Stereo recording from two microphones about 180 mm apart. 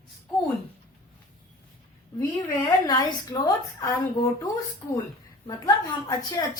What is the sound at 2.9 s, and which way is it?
A woman's voice, 20° left (ahead or behind).